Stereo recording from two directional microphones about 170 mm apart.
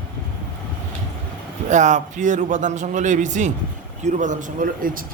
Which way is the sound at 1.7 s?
45° right (ahead or behind).